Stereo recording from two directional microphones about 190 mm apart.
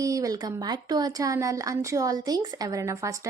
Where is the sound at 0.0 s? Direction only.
20° right (ahead or behind).